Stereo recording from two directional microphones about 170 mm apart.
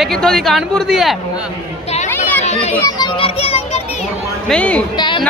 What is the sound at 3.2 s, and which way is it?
Speech, 35° left (ahead or behind).